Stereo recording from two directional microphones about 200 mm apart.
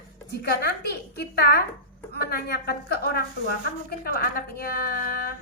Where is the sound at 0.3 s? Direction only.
50° left (ahead or behind).